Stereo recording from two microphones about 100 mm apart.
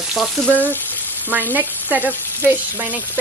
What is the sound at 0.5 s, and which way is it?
Speech, 15° left (ahead or behind).